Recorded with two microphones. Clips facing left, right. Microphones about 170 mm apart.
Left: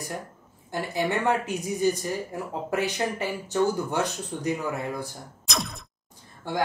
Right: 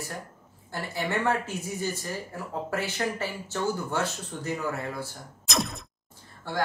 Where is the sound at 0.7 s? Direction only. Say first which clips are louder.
Left 3 dB; 15° left (ahead or behind).